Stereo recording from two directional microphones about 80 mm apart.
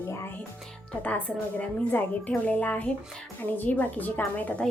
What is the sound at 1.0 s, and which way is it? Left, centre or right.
A woman's voice, centre.